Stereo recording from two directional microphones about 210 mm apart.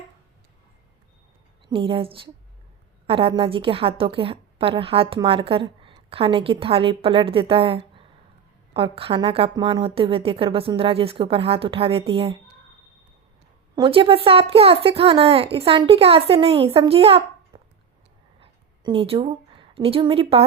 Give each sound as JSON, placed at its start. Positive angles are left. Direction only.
{"t": 1.6, "sound": "a woman's voice", "side_deg": -25}
{"t": 13.7, "sound": "a woman's voice", "side_deg": -25}
{"t": 18.3, "sound": "a sound", "side_deg": -25}